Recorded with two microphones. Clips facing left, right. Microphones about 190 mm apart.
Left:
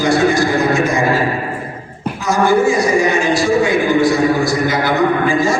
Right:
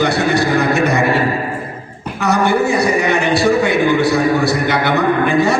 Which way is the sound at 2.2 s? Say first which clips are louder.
Left 1 dB; 65° right (ahead or behind).